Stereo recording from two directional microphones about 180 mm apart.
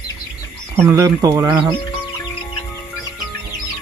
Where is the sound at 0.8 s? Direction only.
15° right (ahead or behind).